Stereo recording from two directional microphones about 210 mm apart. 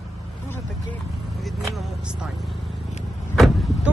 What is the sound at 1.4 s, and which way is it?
Speech, centre (ahead or behind).